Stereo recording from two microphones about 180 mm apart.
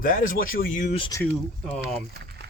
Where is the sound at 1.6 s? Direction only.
5° left (ahead or behind).